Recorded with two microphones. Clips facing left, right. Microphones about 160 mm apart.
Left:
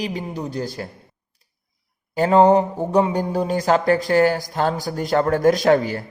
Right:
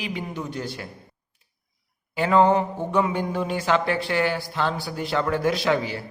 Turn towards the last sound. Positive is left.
turn(degrees=50)  # may be behind; listen again after turning